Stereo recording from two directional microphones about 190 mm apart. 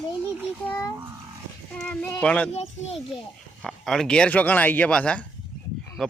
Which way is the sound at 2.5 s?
35° left (ahead or behind).